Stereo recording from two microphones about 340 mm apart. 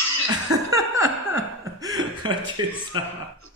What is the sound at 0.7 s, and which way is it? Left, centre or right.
Chuckle, centre.